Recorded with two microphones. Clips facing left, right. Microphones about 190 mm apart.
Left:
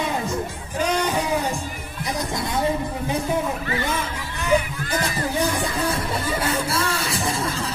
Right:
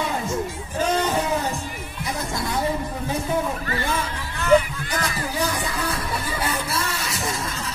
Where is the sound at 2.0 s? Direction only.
20° left (ahead or behind).